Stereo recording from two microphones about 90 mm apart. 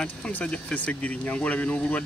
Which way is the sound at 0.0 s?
20° left (ahead or behind).